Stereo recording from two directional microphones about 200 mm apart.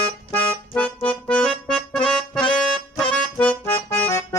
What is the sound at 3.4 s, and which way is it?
Accordion, 25° left (ahead or behind).